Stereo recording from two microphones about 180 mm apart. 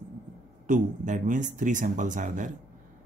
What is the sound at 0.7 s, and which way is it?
Speech, 45° right (ahead or behind).